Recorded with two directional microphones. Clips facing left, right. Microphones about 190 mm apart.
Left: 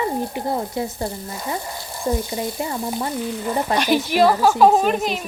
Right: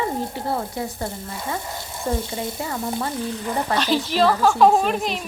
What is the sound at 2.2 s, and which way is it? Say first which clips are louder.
Speech: left 2 dB; 25° right (ahead or behind).